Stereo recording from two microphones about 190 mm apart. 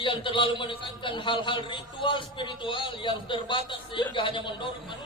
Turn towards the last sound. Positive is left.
turn(degrees=25)  # may be behind; listen again after turning